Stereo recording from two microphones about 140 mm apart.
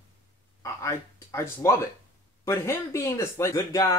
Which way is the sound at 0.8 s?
20° left (ahead or behind).